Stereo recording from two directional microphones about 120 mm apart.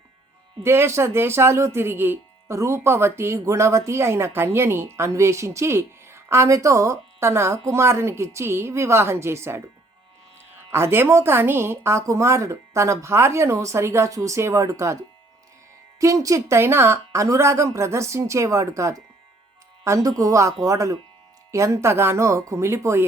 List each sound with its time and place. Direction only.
0.6 s speech: 20° right (ahead or behind)
10.7 s speech: 20° right (ahead or behind)
16.0 s speech: 25° right (ahead or behind)